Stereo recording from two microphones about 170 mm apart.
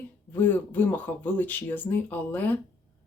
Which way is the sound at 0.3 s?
10° left (ahead or behind).